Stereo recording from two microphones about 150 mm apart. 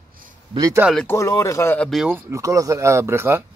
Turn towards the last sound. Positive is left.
turn(degrees=-20)  # may be behind; listen again after turning